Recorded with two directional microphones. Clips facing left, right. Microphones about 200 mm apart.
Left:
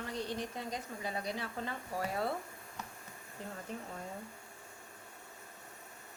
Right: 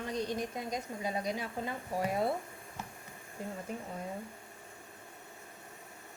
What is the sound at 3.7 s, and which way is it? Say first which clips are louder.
Speech: right 1 dB; 10° right (ahead or behind).